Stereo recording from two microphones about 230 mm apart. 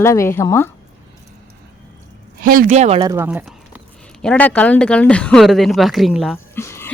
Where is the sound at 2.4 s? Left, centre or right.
Right; by 3.8 s centre.